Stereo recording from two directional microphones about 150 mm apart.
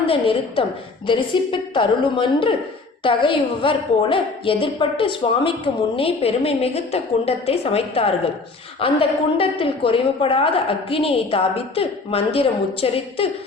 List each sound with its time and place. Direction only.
0.1 s a woman's voice: 35° left (ahead or behind)